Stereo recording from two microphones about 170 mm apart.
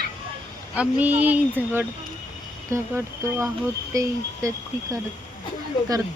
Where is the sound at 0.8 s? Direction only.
10° right (ahead or behind).